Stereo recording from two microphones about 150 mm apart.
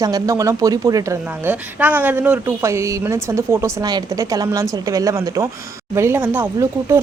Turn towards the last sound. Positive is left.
turn(degrees=-15)  # may be behind; listen again after turning